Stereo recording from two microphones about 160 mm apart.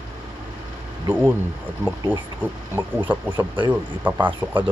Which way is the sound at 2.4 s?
10° right (ahead or behind).